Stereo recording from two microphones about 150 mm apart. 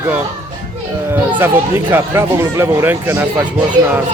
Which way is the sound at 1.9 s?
20° right (ahead or behind).